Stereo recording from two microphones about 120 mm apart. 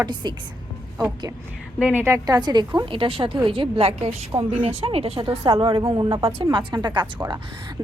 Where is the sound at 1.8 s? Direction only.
15° right (ahead or behind).